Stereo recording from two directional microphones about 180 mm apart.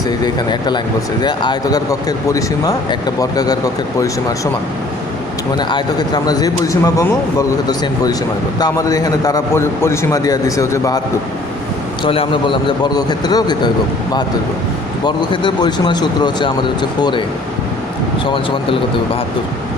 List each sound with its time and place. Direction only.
1.2 s speech: 25° left (ahead or behind)
5.5 s speech: 25° left (ahead or behind)
12.0 s speech: 30° left (ahead or behind)
15.0 s speech: 25° left (ahead or behind)